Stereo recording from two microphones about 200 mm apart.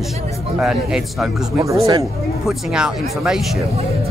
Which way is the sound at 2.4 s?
5° right (ahead or behind).